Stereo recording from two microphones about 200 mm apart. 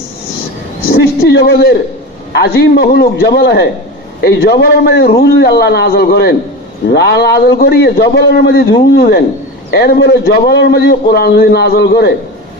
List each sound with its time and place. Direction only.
0.9 s a man's voice: 50° left (ahead or behind)